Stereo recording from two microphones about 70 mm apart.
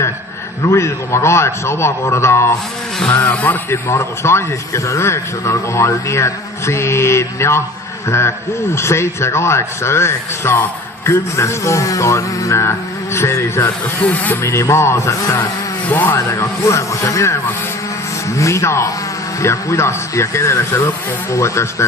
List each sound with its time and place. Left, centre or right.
0.6 s speech: left
3.1 s speech: left
3.7 s speech: left
11.0 s music: left
13.1 s speech: left
14.4 s music: left
15.9 s speech: left
16.1 s music: left
18.3 s music: left